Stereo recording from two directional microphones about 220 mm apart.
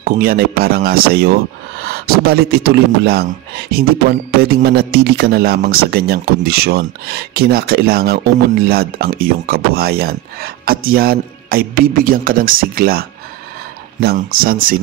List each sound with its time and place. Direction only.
0.0 s speech: 40° right (ahead or behind)
14.0 s speech: 40° right (ahead or behind)